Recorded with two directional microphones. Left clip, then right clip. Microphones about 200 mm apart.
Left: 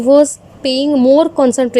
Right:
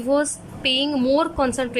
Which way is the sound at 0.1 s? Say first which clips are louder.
Left 12 dB; 25° left (ahead or behind).